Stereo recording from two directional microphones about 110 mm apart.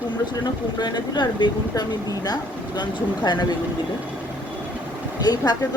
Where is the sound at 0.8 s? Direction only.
40° left (ahead or behind).